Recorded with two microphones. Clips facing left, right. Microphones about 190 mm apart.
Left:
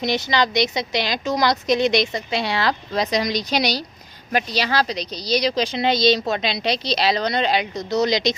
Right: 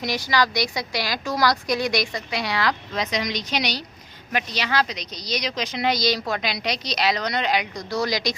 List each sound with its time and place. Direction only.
0.0 s a woman's voice: 25° left (ahead or behind)